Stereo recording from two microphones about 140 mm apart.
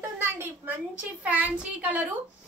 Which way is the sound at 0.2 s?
15° right (ahead or behind).